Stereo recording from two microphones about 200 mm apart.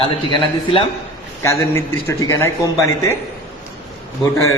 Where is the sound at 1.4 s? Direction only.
15° left (ahead or behind).